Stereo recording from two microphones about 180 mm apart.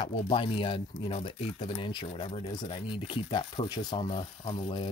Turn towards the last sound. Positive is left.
turn(degrees=30)  # may be behind; listen again after turning